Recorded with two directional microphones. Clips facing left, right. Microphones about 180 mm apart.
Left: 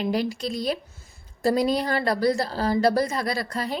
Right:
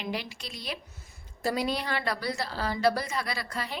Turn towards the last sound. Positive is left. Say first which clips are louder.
# left 7 dB
turn(degrees=40)  # may be behind; listen again after turning